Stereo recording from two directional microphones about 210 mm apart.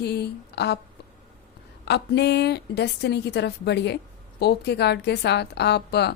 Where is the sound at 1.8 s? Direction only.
55° left (ahead or behind).